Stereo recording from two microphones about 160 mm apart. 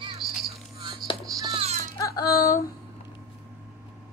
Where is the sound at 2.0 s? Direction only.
20° left (ahead or behind).